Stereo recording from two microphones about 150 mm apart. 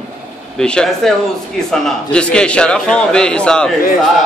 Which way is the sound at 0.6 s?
5° left (ahead or behind).